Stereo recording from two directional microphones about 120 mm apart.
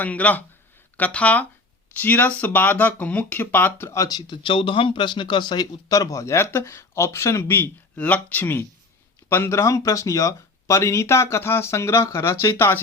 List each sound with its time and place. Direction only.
0.0 s speech: 10° left (ahead or behind); by 4.2 s 25° left (ahead or behind)
4.3 s speech: 50° left (ahead or behind); by 12.8 s 20° left (ahead or behind)